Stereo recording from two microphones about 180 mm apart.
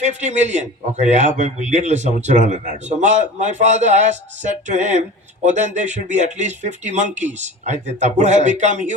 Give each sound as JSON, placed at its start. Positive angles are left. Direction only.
{"t": 0.0, "sound": "a man's voice", "side_deg": -40}